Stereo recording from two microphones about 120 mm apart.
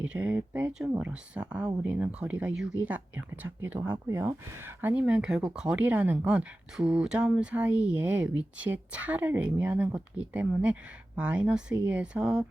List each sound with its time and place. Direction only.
0.0 s speech: 15° right (ahead or behind)
0.7 s speech: 5° right (ahead or behind)